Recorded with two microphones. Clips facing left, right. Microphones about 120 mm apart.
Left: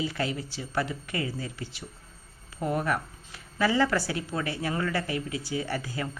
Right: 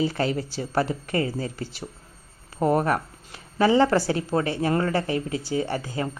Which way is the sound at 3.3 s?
30° right (ahead or behind).